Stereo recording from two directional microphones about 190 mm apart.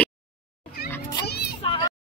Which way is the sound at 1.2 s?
55° left (ahead or behind).